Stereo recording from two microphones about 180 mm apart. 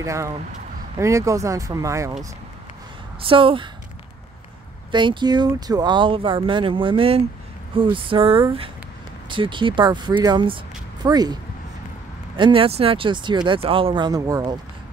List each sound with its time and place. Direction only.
0.0 s speech: 15° right (ahead or behind)
3.2 s speech: 30° right (ahead or behind)
4.9 s speech: 25° right (ahead or behind)
12.4 s speech: 30° right (ahead or behind)